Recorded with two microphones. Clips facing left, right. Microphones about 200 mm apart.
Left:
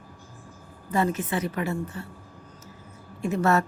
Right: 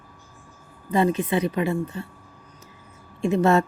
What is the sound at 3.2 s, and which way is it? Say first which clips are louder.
Speech: right 4 dB; 20° right (ahead or behind).